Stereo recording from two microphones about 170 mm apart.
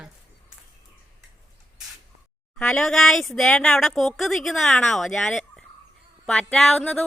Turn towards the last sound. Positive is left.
turn(degrees=5)  # may be behind; listen again after turning